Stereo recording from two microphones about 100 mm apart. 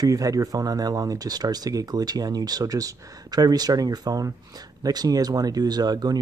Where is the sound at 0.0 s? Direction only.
35° right (ahead or behind).